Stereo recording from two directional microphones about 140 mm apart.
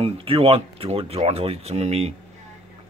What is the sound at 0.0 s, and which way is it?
Speech, 40° right (ahead or behind).